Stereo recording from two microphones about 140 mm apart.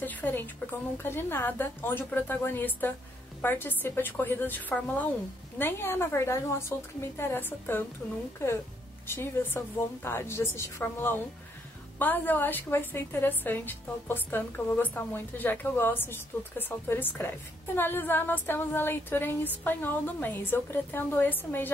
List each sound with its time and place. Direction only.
0.0 s a woman's voice: 15° left (ahead or behind)
9.0 s a woman's voice: 15° left (ahead or behind)